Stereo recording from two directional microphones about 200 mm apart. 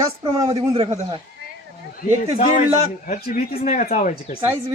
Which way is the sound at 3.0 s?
45° left (ahead or behind).